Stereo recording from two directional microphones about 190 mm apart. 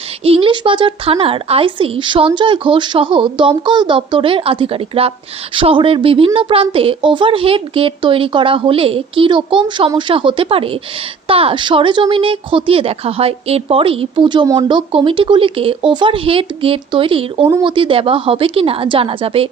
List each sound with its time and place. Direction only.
0.3 s speech: 30° right (ahead or behind)